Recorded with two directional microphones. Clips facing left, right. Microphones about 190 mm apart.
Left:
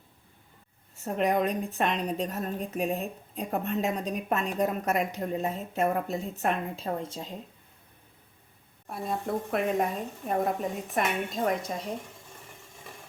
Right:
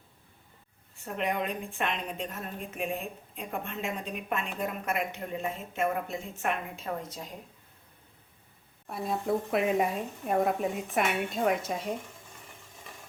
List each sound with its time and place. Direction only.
0.9 s a woman's voice: 40° left (ahead or behind)
8.9 s speech: centre (ahead or behind)